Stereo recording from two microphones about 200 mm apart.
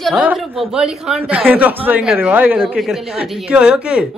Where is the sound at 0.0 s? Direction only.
5° right (ahead or behind).